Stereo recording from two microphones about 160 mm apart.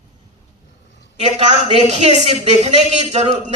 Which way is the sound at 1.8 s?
45° right (ahead or behind).